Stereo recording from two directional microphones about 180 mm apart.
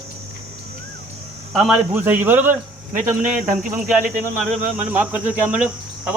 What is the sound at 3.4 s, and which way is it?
Speech, 50° right (ahead or behind).